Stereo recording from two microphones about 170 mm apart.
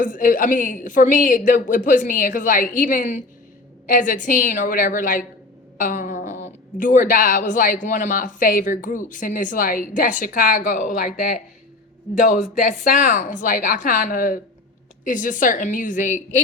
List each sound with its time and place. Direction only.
0.0 s a woman's voice: 50° left (ahead or behind)